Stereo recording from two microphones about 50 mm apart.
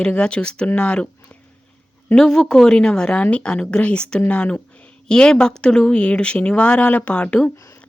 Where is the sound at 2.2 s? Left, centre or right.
Centre.